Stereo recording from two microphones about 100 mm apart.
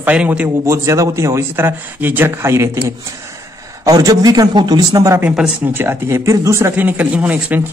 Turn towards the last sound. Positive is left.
turn(degrees=-15)  # may be behind; listen again after turning